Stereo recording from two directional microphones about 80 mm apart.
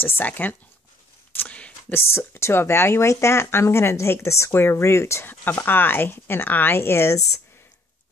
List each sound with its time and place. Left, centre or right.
0.0 s speech: left
1.3 s a sound: centre
2.0 s speech: left
5.3 s speech: left